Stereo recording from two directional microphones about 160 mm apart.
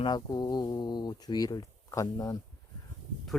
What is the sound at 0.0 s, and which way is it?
Speech, 25° left (ahead or behind).